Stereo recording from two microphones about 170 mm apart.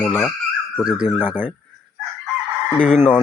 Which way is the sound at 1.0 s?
40° left (ahead or behind).